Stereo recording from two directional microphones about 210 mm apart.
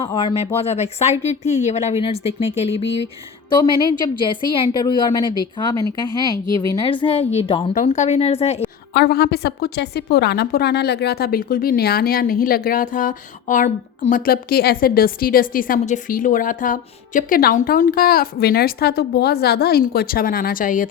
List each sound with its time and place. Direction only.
0.0 s speech: 20° left (ahead or behind)
3.5 s a woman's voice: 20° left (ahead or behind)
8.9 s a woman's voice: 50° left (ahead or behind)